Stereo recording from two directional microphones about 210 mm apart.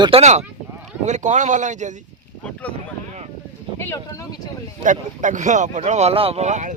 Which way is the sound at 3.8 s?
15° left (ahead or behind).